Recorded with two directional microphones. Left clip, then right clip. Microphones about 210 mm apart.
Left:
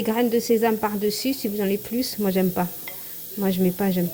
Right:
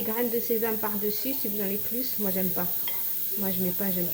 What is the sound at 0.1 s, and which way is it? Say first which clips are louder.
Speech: left 8 dB; 45° left (ahead or behind).